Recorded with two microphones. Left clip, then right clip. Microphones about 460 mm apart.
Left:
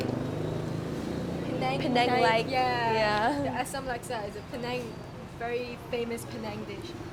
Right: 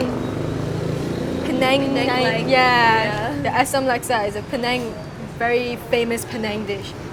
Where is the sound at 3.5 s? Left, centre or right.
Centre.